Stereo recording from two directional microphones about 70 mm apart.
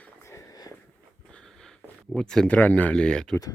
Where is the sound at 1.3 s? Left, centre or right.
Centre.